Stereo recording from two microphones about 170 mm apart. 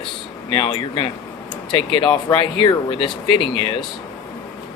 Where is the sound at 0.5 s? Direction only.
30° left (ahead or behind).